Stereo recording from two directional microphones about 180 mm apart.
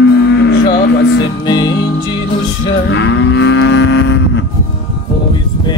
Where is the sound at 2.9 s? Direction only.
85° left.